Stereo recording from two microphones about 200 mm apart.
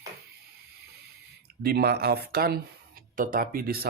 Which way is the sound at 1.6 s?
50° right (ahead or behind).